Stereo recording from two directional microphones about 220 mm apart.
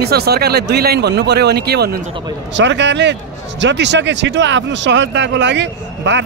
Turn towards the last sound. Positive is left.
turn(degrees=-55)  # may be behind; listen again after turning